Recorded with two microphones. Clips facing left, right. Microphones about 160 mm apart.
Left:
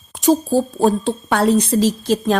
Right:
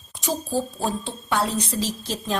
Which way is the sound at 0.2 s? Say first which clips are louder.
Left 10 dB; 50° left (ahead or behind).